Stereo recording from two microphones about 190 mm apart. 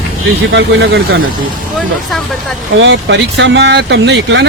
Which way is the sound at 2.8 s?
75° right (ahead or behind).